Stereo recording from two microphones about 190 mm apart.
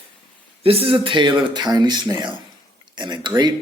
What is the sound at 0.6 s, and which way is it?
Speech, 30° right (ahead or behind).